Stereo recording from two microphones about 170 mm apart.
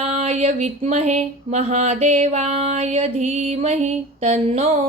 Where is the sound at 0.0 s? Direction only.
40° right (ahead or behind).